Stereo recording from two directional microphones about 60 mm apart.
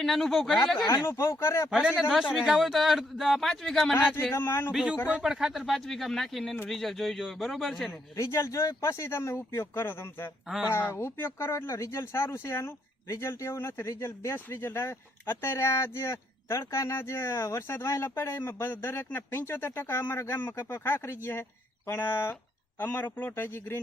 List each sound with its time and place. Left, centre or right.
0.0 s a man's voice: centre
0.9 s speech: left
1.7 s speech: centre
2.0 s a man's voice: centre
4.4 s speech: left
5.2 s speech: centre
5.5 s a man's voice: centre
8.1 s speech: left
11.7 s speech: left
14.3 s speech: left